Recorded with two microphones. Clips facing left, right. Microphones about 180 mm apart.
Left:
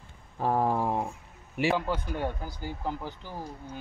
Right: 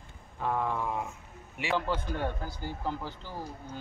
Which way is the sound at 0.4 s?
35° left (ahead or behind).